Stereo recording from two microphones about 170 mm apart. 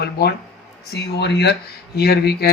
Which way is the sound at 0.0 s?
70° left (ahead or behind).